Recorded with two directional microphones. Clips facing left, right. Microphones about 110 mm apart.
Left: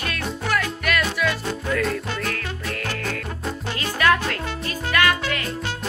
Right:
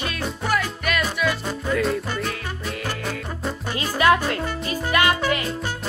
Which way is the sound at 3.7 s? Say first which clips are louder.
Right 2 dB; 20° right (ahead or behind).